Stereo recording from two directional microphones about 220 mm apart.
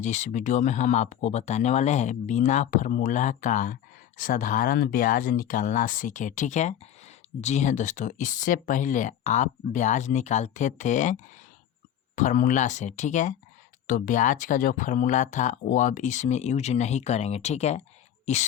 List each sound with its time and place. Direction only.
0.0 s speech: 30° left (ahead or behind)